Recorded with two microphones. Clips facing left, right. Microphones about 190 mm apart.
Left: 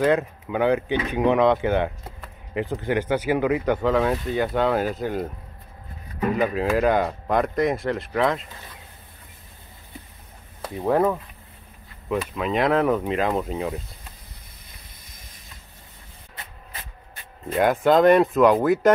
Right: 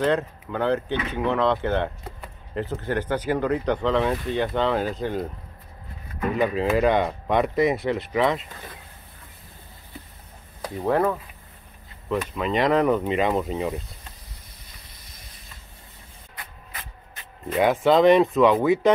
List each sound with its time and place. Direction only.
0.0 s speech: 10° left (ahead or behind)
6.3 s speech: 5° left (ahead or behind)
10.6 s speech: 5° left (ahead or behind)
12.2 s speech: centre (ahead or behind)
17.5 s speech: centre (ahead or behind)